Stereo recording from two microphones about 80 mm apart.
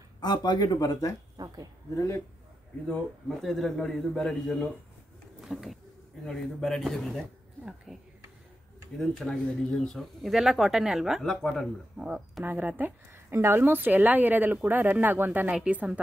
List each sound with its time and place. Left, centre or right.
0.2 s speech: left
1.3 s speech: right
2.0 s a man's voice: left
3.3 s a man's voice: centre
7.6 s a woman's voice: centre
8.9 s a man's voice: centre
12.0 s a woman's voice: centre